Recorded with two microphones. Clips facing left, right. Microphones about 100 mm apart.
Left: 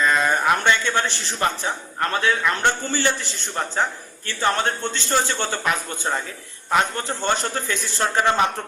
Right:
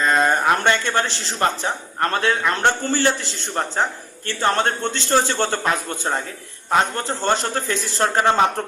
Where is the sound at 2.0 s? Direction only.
40° right (ahead or behind).